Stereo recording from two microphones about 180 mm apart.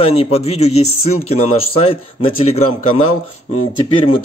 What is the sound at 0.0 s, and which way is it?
Speech, 35° left (ahead or behind).